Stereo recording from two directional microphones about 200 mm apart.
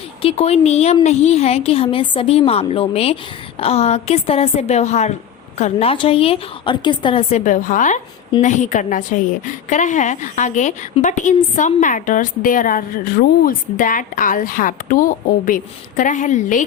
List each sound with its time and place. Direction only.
0.2 s a woman's voice: 30° left (ahead or behind)